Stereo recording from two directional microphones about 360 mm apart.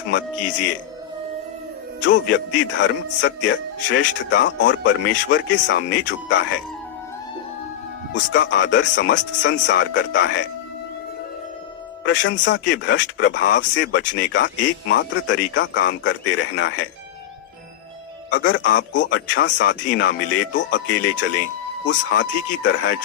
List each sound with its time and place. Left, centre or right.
0.1 s a man's voice: left
2.0 s speech: left
8.1 s speech: left
12.2 s speech: left
18.3 s speech: left